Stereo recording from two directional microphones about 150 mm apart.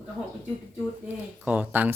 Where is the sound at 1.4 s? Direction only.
10° right (ahead or behind).